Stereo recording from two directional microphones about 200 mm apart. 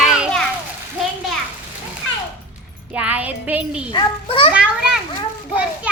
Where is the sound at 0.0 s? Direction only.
Centre (ahead or behind).